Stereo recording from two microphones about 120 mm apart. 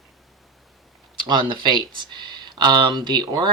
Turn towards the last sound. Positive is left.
turn(degrees=-40)  # may be behind; listen again after turning